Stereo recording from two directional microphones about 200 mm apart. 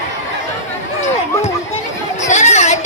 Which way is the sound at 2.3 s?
35° left (ahead or behind).